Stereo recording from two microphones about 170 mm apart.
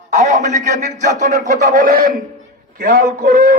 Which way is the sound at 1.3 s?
45° right (ahead or behind).